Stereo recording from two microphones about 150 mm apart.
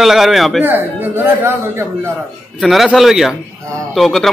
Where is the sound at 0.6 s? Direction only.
15° right (ahead or behind).